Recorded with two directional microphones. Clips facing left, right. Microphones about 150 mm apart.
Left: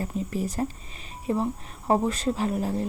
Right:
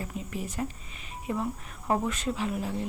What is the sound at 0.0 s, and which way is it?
Speech, 35° left (ahead or behind).